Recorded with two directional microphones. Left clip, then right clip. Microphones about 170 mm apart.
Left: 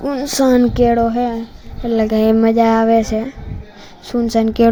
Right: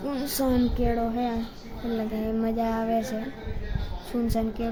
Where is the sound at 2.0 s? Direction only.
55° left (ahead or behind).